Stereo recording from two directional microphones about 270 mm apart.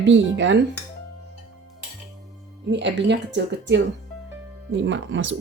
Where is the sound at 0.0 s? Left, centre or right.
Right.